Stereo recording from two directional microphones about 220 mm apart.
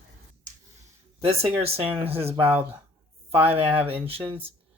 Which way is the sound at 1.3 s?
25° right (ahead or behind).